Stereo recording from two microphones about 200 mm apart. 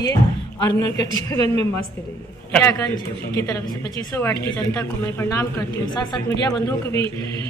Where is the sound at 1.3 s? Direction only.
30° right (ahead or behind).